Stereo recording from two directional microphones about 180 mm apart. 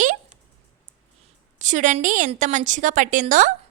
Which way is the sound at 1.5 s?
45° right (ahead or behind).